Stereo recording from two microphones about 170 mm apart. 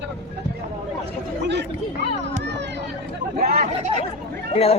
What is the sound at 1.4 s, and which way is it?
Chatter, 90° right.